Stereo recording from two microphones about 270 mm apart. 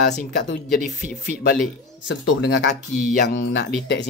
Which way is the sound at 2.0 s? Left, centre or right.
Left.